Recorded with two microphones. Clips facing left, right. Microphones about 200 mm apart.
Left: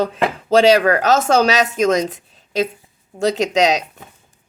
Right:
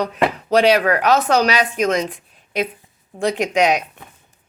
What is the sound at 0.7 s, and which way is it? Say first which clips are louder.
A woman's voice: left 2 dB; 40° left (ahead or behind).